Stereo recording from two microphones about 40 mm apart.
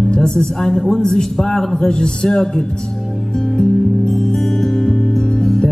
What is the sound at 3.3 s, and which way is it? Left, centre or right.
Music, centre.